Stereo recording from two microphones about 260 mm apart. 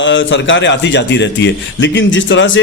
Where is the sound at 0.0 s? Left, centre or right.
Left.